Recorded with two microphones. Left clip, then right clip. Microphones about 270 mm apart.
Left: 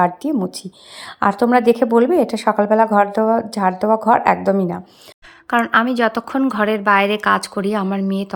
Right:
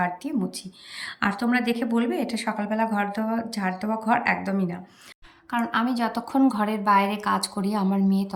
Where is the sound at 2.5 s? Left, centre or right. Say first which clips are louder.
Left 13 dB; left.